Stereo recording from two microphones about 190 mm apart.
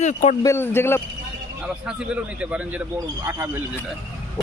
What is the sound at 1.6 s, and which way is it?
A man's voice, 5° right (ahead or behind).